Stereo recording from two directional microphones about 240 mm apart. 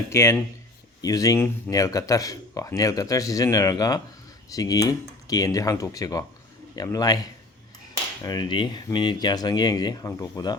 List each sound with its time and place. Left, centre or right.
0.1 s speech: centre
8.2 s speech: centre